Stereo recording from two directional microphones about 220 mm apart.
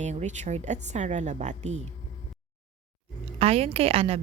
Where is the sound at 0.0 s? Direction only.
30° right (ahead or behind).